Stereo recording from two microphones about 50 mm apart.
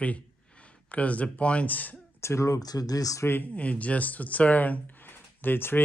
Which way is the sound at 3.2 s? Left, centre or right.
Left.